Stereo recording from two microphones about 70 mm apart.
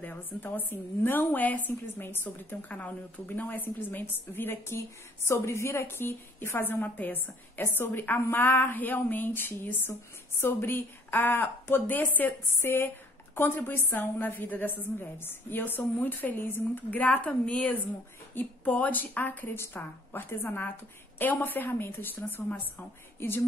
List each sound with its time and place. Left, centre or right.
0.0 s a woman's voice: left